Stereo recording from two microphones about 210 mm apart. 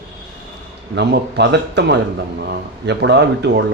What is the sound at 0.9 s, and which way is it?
Speech, 55° right (ahead or behind).